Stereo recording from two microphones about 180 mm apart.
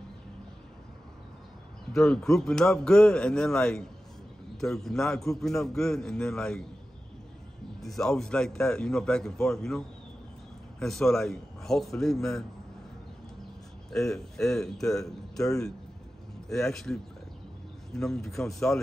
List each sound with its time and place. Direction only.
1.9 s a man's voice: 5° left (ahead or behind)
7.8 s a man's voice: centre (ahead or behind)
13.9 s a man's voice: centre (ahead or behind)